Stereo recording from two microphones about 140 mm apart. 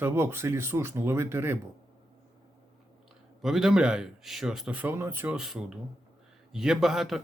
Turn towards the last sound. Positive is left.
turn(degrees=0)  # may be behind; listen again after turning